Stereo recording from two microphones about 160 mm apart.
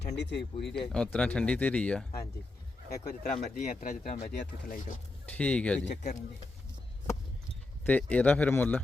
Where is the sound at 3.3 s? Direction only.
50° left (ahead or behind).